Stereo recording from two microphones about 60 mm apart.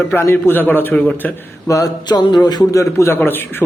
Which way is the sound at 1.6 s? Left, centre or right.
Left.